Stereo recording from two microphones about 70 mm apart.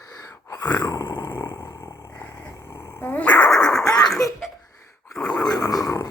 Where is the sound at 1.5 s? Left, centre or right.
Left.